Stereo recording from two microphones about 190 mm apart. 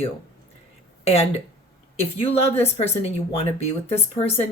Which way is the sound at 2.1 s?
30° left (ahead or behind).